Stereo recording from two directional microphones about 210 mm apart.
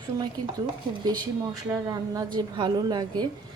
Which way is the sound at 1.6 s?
15° right (ahead or behind).